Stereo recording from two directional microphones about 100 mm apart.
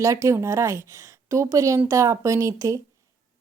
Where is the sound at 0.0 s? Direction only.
30° right (ahead or behind).